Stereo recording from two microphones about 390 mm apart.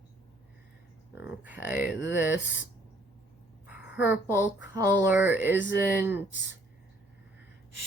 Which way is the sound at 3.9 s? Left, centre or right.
Centre.